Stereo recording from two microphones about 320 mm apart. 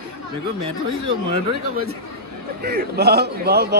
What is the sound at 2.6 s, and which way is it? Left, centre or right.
A man's voice, right.